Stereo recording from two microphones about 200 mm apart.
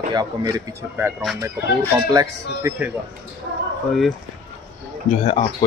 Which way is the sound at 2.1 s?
15° right (ahead or behind).